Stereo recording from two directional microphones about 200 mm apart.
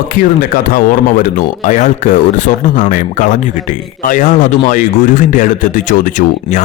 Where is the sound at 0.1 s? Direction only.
40° left (ahead or behind).